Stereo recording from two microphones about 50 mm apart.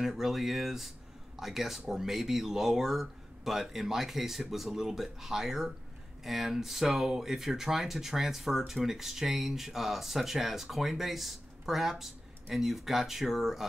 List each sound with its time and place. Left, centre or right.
0.0 s speech: centre